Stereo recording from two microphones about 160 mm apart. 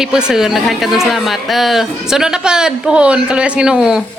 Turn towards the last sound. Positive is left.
turn(degrees=-5)  # may be behind; listen again after turning